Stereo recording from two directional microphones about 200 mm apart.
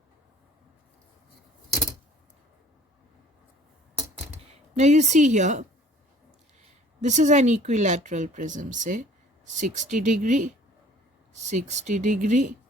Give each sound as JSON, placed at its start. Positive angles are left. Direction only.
{"t": 4.8, "sound": "speech", "side_deg": -35}
{"t": 7.0, "sound": "speech", "side_deg": -35}